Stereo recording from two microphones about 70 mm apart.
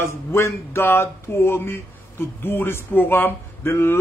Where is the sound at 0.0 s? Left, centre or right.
Left.